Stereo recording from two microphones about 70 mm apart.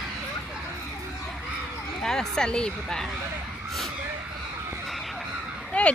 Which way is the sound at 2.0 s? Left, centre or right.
Centre.